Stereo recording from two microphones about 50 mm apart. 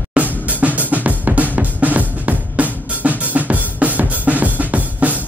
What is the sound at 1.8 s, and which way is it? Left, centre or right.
Drum, right.